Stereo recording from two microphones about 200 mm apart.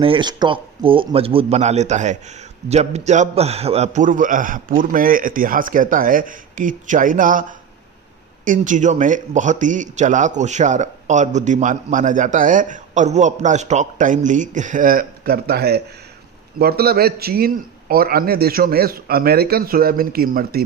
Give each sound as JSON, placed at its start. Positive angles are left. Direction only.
{"t": 0.0, "sound": "a man's voice", "side_deg": -25}
{"t": 8.4, "sound": "a man's voice", "side_deg": -40}